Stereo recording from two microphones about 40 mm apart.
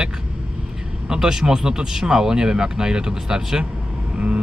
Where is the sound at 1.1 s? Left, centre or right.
Centre.